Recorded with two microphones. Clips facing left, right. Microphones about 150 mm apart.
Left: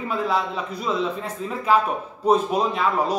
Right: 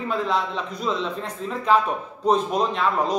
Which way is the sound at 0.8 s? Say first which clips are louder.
Left 2 dB; 5° left (ahead or behind).